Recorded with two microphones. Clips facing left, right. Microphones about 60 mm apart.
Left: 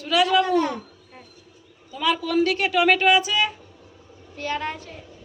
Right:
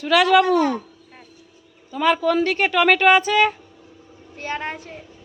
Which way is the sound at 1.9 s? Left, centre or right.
Right.